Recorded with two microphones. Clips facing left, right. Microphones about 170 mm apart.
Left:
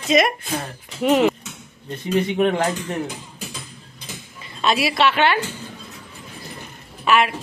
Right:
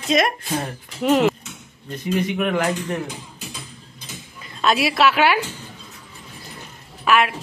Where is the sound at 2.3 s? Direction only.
30° left (ahead or behind).